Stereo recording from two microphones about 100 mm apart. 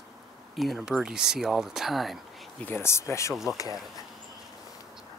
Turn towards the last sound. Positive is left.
turn(degrees=0)  # may be behind; listen again after turning